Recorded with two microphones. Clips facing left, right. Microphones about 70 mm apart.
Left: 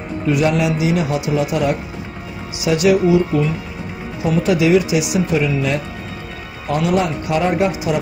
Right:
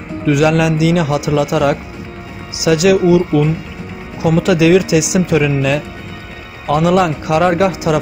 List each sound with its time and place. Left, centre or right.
0.2 s speech: right
6.8 s speech: right